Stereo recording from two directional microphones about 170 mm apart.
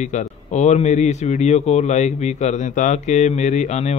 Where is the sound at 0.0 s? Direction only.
45° left (ahead or behind).